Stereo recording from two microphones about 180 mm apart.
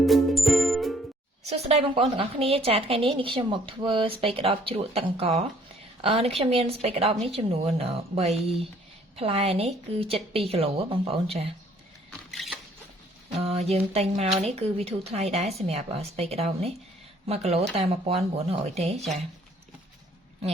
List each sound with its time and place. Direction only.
0.0 s music: centre (ahead or behind)
1.5 s a woman's voice: 35° right (ahead or behind)
12.3 s a sound: centre (ahead or behind)
13.3 s a woman's voice: 35° right (ahead or behind)